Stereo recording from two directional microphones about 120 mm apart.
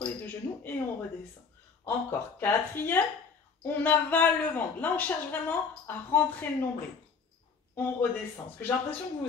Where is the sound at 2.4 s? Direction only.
15° left (ahead or behind).